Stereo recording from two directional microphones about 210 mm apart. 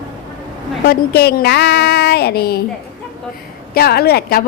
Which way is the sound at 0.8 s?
50° left (ahead or behind).